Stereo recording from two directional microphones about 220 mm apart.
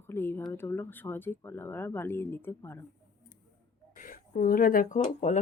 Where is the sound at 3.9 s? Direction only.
40° left (ahead or behind).